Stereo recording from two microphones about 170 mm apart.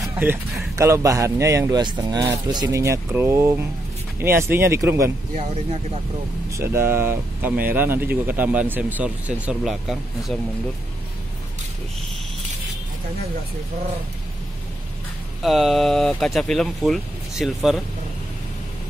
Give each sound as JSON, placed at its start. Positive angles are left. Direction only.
{"t": 0.0, "sound": "speech", "side_deg": -15}
{"t": 5.3, "sound": "speech", "side_deg": -40}
{"t": 6.5, "sound": "speech", "side_deg": -15}
{"t": 15.4, "sound": "speech", "side_deg": 0}